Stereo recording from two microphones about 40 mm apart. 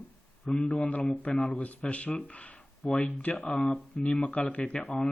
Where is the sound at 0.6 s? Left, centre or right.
Left.